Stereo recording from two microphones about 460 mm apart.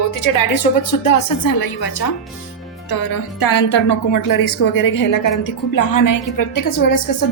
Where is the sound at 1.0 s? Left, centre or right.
Left.